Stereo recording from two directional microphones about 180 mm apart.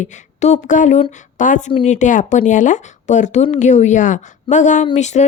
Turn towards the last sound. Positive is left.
turn(degrees=40)  # may be behind; listen again after turning